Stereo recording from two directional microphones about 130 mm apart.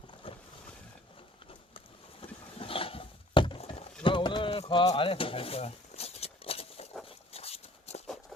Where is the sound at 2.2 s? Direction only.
45° left (ahead or behind).